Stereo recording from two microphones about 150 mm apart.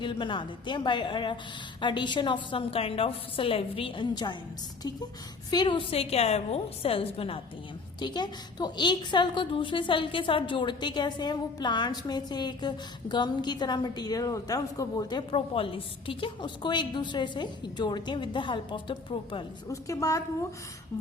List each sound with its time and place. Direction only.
0.0 s a woman's voice: 35° left (ahead or behind)
7.9 s a woman's voice: 30° left (ahead or behind)
19.6 s a woman's voice: 20° left (ahead or behind)